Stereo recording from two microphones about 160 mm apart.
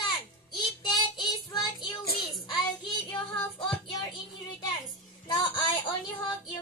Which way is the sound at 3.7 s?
30° left (ahead or behind).